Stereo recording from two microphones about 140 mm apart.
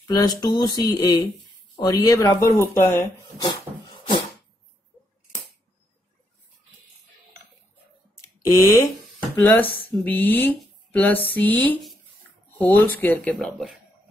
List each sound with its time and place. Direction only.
0.0 s speech: 30° left (ahead or behind)
8.4 s speech: 20° left (ahead or behind); by 13.7 s 5° left (ahead or behind)